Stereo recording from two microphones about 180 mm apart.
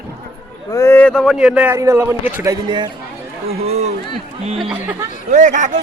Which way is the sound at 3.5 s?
35° right (ahead or behind).